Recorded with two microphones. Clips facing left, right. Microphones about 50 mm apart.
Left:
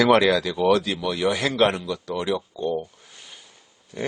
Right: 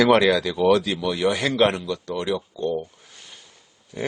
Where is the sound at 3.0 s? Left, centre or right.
Centre.